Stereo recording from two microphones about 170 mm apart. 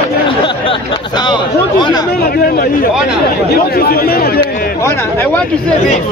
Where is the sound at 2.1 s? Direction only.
65° left (ahead or behind).